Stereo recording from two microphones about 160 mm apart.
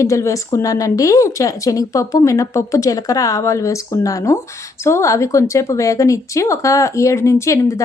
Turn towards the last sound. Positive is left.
turn(degrees=20)  # may be behind; listen again after turning